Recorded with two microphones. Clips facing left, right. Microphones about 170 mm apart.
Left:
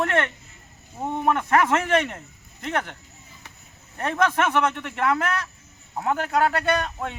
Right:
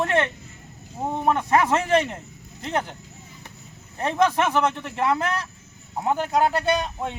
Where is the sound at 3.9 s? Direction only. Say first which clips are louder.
Right 2 dB; 15° right (ahead or behind).